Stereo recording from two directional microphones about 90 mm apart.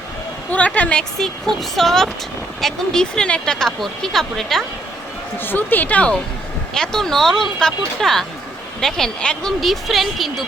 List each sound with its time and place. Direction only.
0.5 s speech: 15° left (ahead or behind)
5.4 s speech: 20° left (ahead or behind); by 10.4 s centre (ahead or behind)